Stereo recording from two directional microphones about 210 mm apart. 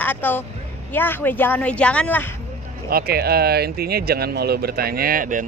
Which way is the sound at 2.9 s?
45° right (ahead or behind).